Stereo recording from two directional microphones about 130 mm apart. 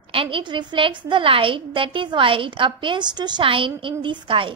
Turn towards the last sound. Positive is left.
turn(degrees=-40)  # may be behind; listen again after turning